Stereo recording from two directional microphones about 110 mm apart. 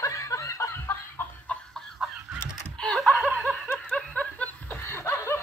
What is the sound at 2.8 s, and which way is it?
Snicker, 5° left (ahead or behind).